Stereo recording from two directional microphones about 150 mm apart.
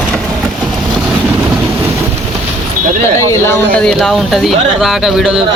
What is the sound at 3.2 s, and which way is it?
Speech, 20° left (ahead or behind).